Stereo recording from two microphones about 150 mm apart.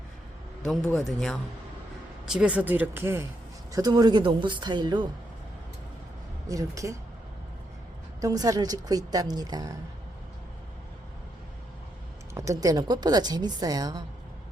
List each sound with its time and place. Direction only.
0.6 s a man's voice: 5° left (ahead or behind); by 5.0 s 30° right (ahead or behind)
6.5 s a woman's voice: 20° right (ahead or behind)
8.2 s a woman's voice: 25° right (ahead or behind)
12.3 s a woman's voice: 20° right (ahead or behind)